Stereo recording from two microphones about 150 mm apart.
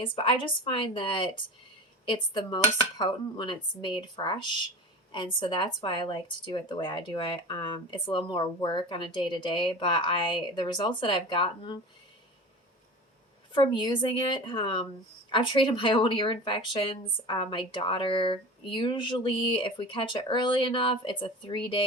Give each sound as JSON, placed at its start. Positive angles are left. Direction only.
{"t": 0.0, "sound": "speech", "side_deg": 35}
{"t": 13.5, "sound": "speech", "side_deg": 35}